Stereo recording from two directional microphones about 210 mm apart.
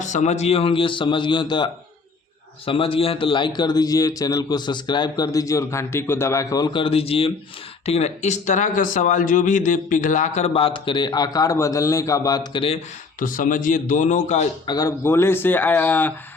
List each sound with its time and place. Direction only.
0.0 s speech: 35° left (ahead or behind)
13.1 s speech: 40° left (ahead or behind)
14.7 s speech: 15° left (ahead or behind)